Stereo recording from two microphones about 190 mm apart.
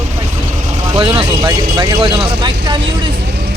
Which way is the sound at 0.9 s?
25° right (ahead or behind).